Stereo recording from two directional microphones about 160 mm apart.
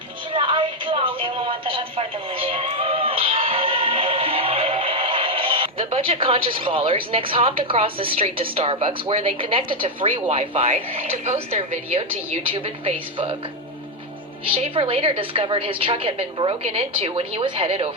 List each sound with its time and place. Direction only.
0.3 s a sound: 30° right (ahead or behind)
12.5 s a woman's voice: 35° right (ahead or behind)
14.4 s a woman's voice: 35° right (ahead or behind)